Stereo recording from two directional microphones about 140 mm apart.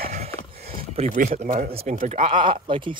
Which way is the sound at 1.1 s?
75° right (ahead or behind).